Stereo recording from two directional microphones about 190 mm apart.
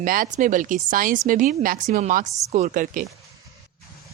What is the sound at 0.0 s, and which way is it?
Speech, 45° right (ahead or behind).